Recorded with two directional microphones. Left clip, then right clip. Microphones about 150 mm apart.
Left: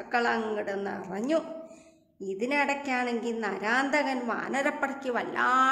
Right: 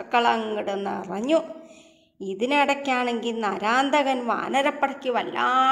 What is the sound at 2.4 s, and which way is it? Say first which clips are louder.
A woman's voice: right 6 dB; 20° right (ahead or behind).